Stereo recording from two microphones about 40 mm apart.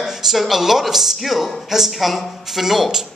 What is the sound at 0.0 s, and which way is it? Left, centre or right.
Speech, centre.